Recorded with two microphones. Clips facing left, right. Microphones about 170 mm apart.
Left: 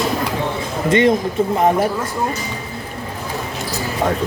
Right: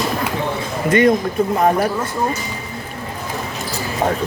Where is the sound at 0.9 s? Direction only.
25° left (ahead or behind).